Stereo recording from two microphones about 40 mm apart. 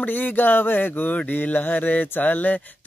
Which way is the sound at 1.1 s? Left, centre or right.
Left.